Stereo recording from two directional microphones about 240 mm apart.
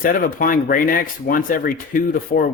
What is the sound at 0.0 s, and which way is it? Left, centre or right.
Speech, left.